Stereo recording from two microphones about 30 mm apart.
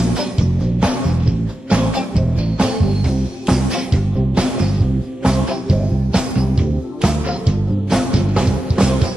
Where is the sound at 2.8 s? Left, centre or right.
Centre.